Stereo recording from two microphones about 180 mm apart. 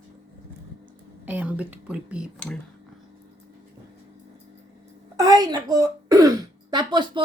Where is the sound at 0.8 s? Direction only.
10° right (ahead or behind).